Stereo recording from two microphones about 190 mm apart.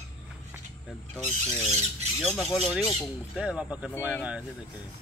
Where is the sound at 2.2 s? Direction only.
Centre (ahead or behind).